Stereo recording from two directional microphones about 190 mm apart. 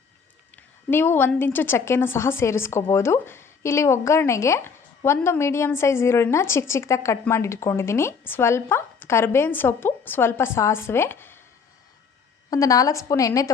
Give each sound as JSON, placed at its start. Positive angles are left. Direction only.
{"t": 0.5, "sound": "a woman's voice", "side_deg": 10}
{"t": 12.5, "sound": "a woman's voice", "side_deg": 20}